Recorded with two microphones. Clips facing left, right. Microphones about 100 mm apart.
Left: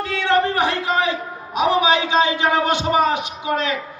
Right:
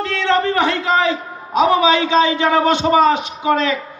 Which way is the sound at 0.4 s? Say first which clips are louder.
Right 2 dB; 65° right (ahead or behind).